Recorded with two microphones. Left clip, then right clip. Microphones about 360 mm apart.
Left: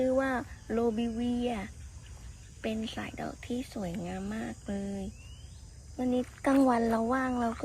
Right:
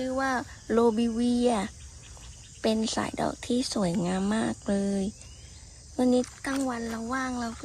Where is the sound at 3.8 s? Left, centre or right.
Right.